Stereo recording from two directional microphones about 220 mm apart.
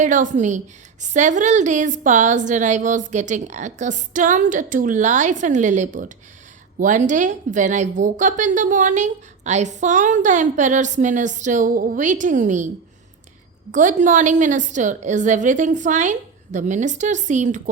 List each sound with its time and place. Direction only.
0.0 s a woman's voice: 35° right (ahead or behind)